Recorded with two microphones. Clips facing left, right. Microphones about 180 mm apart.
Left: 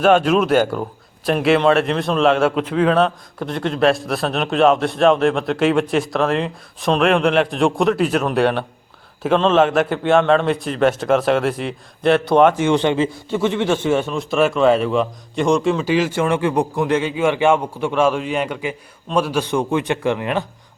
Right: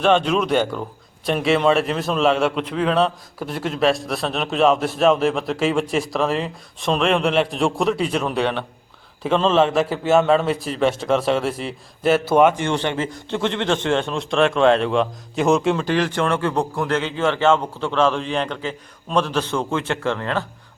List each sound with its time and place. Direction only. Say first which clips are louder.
0.0 s a man's voice: left 3 dB; 5° left (ahead or behind)
12.5 s a man's voice: left 6 dB; 10° left (ahead or behind)